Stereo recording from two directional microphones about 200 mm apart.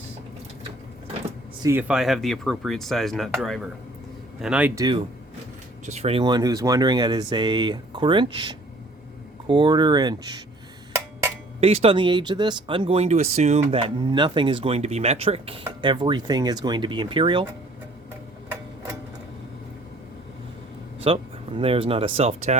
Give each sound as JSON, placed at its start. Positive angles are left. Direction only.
{"t": 1.6, "sound": "speech", "side_deg": -10}
{"t": 5.8, "sound": "speech", "side_deg": -35}
{"t": 9.5, "sound": "speech", "side_deg": -20}
{"t": 11.6, "sound": "speech", "side_deg": -30}
{"t": 18.5, "sound": "a sound", "side_deg": -15}
{"t": 21.0, "sound": "speech", "side_deg": -30}